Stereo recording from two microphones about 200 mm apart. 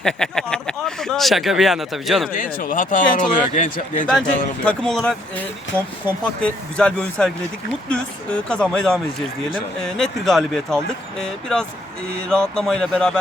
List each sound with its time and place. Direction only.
0.0 s speech: 5° left (ahead or behind)
2.3 s a man's voice: 45° left (ahead or behind)
4.1 s speech: 5° left (ahead or behind)
6.7 s speech: 5° left (ahead or behind)